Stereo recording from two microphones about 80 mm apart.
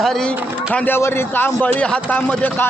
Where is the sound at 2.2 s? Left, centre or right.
Left.